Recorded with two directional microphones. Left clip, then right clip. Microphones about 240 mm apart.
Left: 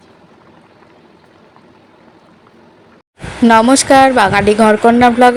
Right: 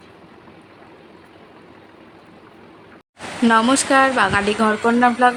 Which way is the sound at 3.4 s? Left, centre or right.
Left.